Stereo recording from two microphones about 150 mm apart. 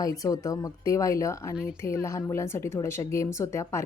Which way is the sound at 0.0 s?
25° left (ahead or behind).